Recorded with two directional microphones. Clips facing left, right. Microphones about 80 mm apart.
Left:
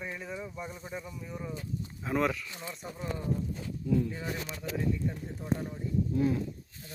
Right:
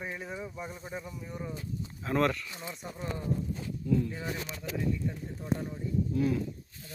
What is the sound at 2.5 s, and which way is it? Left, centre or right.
Speech, centre.